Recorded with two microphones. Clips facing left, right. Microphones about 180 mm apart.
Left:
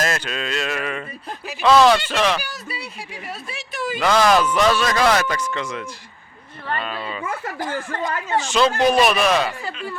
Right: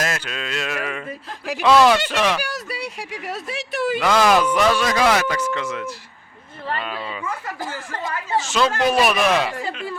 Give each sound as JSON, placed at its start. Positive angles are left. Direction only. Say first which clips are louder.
{"t": 0.0, "sound": "mantra", "louder": "left 2 dB", "side_deg": -5}
{"t": 1.6, "sound": "speech", "louder": "left 1 dB", "side_deg": -10}
{"t": 2.4, "sound": "speech", "louder": "right 5 dB", "side_deg": -85}
{"t": 4.0, "sound": "speech", "louder": "left 1 dB", "side_deg": -5}
{"t": 5.5, "sound": "mantra", "louder": "right 2 dB", "side_deg": -5}
{"t": 6.8, "sound": "speech", "louder": "left 1 dB", "side_deg": -10}
{"t": 8.4, "sound": "mantra", "louder": "left 2 dB", "side_deg": -5}
{"t": 8.8, "sound": "speech", "louder": "left 1 dB", "side_deg": -5}